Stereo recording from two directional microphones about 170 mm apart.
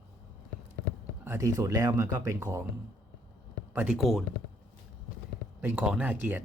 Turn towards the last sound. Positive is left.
turn(degrees=-10)  # may be behind; listen again after turning